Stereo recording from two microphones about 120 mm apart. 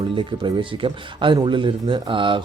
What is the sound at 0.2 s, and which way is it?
Speech, 40° right (ahead or behind).